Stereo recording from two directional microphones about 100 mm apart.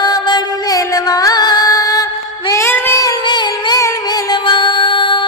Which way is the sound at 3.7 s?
35° left (ahead or behind).